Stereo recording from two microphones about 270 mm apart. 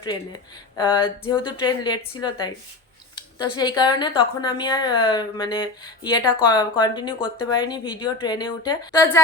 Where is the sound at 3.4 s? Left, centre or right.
Centre.